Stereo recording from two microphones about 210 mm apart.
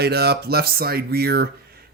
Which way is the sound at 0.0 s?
50° right (ahead or behind).